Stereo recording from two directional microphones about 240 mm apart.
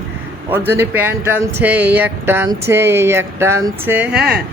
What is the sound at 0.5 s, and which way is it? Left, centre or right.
Speech, centre.